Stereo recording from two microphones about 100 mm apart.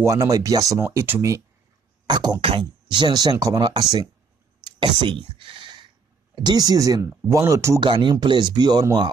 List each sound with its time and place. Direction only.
0.0 s speech: 35° right (ahead or behind)
0.7 s speech: 25° right (ahead or behind)
2.0 s speech: 45° right (ahead or behind)
6.3 s speech: 45° right (ahead or behind)
7.8 s speech: 50° right (ahead or behind)